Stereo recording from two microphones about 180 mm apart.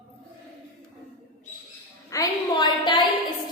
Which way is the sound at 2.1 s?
20° left (ahead or behind).